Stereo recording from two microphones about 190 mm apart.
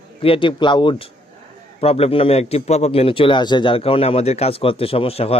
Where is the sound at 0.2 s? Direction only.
30° left (ahead or behind).